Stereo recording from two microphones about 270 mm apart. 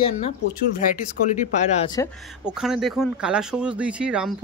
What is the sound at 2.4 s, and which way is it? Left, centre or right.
Speech, centre.